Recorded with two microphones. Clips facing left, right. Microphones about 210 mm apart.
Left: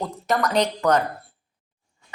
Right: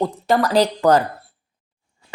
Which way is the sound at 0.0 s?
30° right (ahead or behind).